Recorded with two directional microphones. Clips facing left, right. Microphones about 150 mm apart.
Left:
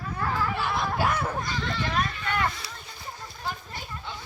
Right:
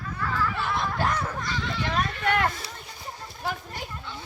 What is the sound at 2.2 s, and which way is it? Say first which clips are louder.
Speech: right 4 dB; 65° right (ahead or behind).